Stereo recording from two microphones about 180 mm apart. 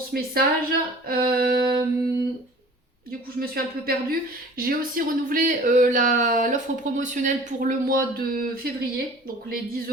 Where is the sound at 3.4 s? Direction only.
55° right (ahead or behind).